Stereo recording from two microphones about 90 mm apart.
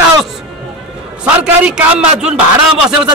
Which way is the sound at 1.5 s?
15° right (ahead or behind).